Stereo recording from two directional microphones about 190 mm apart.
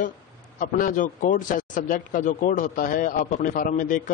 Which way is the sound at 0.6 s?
45° left (ahead or behind).